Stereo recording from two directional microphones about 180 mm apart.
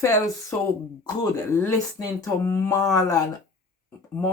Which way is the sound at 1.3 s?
15° left (ahead or behind).